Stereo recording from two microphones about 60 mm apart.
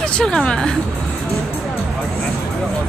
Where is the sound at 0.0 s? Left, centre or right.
Centre.